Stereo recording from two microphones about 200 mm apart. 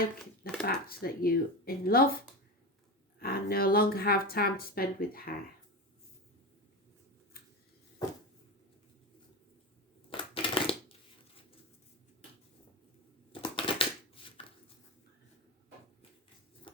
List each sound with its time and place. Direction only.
0.6 s speech: 50° left (ahead or behind)
3.2 s speech: 50° left (ahead or behind)
10.1 s crushing: 25° left (ahead or behind)
13.3 s crushing: 25° left (ahead or behind)
14.4 s a sound: 30° left (ahead or behind)
16.7 s shuffling cards: 25° left (ahead or behind)